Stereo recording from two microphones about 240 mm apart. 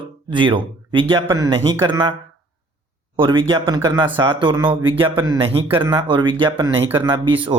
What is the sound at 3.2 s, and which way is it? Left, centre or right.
Speech, right.